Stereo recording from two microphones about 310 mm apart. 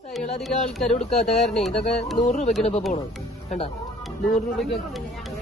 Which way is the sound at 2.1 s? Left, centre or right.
Left.